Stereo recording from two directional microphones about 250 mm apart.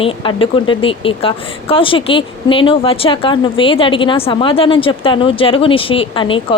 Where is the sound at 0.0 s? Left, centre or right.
Left.